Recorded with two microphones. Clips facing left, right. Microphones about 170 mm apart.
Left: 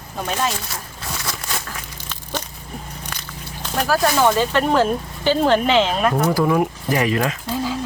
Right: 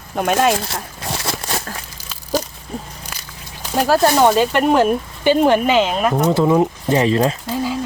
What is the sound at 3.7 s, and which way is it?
Speech, 30° right (ahead or behind).